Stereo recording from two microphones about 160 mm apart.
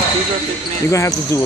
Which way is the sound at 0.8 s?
20° left (ahead or behind).